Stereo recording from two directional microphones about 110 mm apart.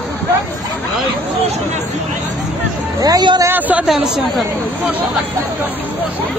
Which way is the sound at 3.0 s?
40° right (ahead or behind).